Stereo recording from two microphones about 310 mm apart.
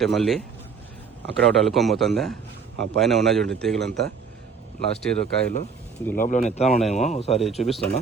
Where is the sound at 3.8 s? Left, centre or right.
Right.